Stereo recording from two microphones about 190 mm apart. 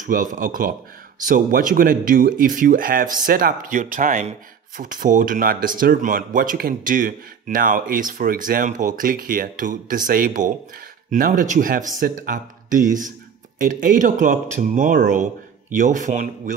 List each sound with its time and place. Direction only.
0.0 s speech: 45° right (ahead or behind)